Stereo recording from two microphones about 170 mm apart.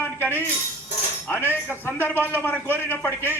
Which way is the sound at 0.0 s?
10° left (ahead or behind).